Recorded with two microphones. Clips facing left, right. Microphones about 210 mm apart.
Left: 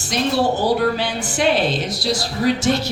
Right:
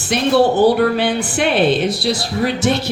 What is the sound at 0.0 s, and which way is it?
A woman's voice, 60° right (ahead or behind).